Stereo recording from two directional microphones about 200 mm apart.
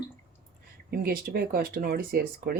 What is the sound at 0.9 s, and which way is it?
Speech, 50° right (ahead or behind).